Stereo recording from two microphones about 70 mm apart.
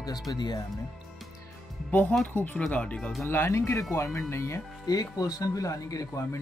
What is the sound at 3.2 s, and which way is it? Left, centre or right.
Speech, left.